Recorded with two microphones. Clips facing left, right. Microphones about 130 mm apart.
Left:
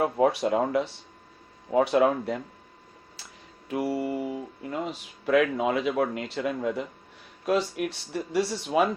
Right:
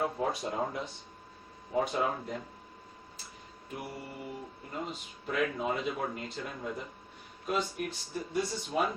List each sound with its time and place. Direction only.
0.0 s speech: 80° left
3.7 s speech: 90° left